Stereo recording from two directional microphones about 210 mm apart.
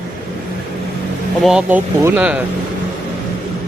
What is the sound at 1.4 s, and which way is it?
Speech, 5° right (ahead or behind).